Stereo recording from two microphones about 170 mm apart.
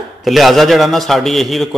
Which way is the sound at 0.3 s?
Centre (ahead or behind).